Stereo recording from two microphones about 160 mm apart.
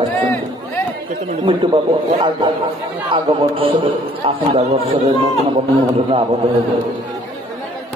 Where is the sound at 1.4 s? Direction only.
30° right (ahead or behind).